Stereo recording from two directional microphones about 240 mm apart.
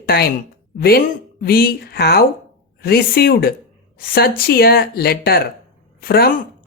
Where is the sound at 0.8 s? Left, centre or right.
Left.